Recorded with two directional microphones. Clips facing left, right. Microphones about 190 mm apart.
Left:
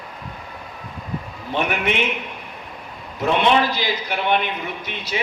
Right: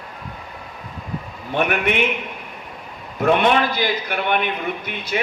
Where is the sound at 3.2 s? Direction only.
50° right (ahead or behind).